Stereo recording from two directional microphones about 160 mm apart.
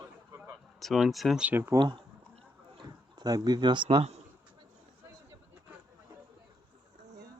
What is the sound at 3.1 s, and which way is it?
Speech, 25° right (ahead or behind).